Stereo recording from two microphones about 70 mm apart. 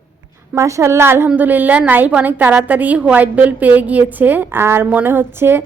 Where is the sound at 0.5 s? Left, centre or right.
Right.